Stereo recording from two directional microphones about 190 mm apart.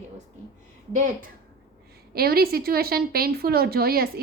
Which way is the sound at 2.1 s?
55° right (ahead or behind).